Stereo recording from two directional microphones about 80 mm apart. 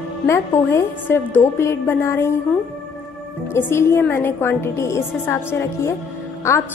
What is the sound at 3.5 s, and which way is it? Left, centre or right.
A woman's voice, left.